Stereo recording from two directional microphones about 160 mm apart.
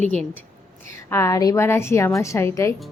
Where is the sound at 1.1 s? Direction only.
20° left (ahead or behind).